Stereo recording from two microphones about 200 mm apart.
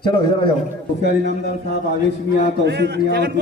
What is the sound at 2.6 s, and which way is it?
Speech, 55° right (ahead or behind).